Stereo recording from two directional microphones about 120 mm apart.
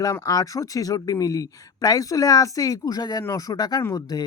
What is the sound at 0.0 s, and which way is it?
Speech, 30° left (ahead or behind).